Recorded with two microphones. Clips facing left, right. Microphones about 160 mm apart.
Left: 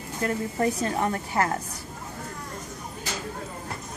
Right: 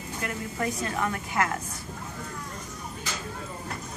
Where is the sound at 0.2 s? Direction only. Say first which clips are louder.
Left 6 dB; 35° left (ahead or behind).